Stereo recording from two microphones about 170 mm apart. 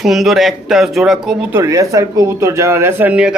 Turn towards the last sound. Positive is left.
turn(degrees=-10)  # may be behind; listen again after turning